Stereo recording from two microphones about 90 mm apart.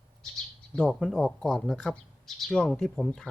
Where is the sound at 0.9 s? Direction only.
5° left (ahead or behind).